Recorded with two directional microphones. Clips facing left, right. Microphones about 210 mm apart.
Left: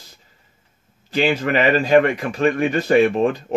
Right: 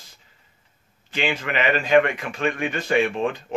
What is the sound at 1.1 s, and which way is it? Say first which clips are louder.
Speech: left 7 dB; 40° left (ahead or behind).